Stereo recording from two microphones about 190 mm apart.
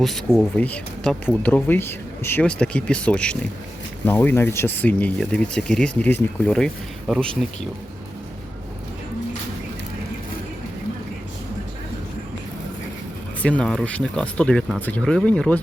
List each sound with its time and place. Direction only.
0.0 s speech: centre (ahead or behind)
13.4 s speech: 5° left (ahead or behind)